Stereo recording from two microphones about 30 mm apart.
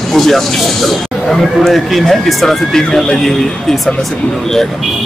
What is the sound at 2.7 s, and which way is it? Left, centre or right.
Speech, centre.